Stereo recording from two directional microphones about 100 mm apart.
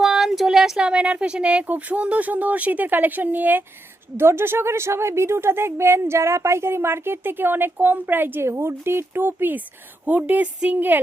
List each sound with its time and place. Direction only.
0.0 s a woman's voice: 5° right (ahead or behind); by 11.0 s 20° right (ahead or behind)